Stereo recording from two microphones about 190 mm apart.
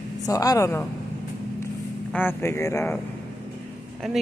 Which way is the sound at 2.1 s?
10° left (ahead or behind).